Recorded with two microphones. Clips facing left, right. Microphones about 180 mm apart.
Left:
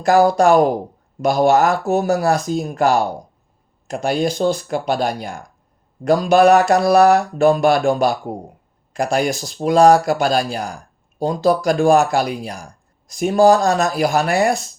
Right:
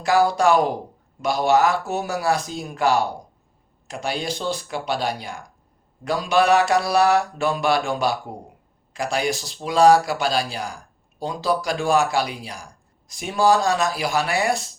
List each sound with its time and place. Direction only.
0.0 s speech: 45° left (ahead or behind)